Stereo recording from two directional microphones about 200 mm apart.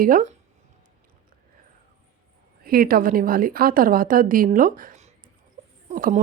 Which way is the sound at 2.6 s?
45° right (ahead or behind).